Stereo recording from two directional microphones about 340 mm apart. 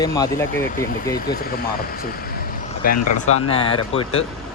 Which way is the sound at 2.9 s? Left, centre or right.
Left.